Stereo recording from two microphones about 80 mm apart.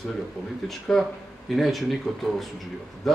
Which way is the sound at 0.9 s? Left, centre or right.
Centre.